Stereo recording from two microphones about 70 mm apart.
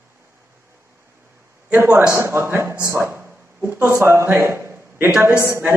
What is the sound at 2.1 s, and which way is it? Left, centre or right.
A man's voice, right.